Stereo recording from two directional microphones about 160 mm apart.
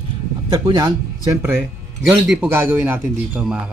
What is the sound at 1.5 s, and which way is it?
A man's voice, 10° right (ahead or behind).